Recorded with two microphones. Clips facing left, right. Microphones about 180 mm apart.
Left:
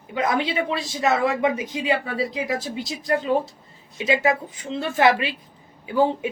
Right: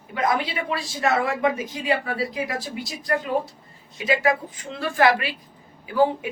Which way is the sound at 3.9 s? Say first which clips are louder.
Left 1 dB; 25° left (ahead or behind).